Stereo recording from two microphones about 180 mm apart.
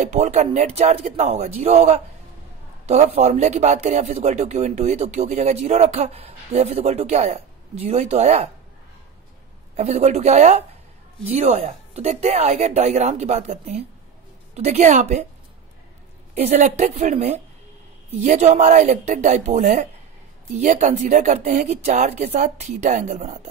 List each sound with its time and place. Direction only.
0.0 s speech: 40° right (ahead or behind)
9.8 s speech: 40° right (ahead or behind)
16.3 s speech: 35° right (ahead or behind)